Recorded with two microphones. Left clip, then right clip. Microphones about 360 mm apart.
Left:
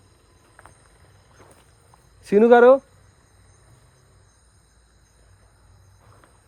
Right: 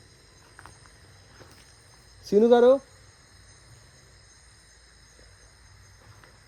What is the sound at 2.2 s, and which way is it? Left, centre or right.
Speech, left.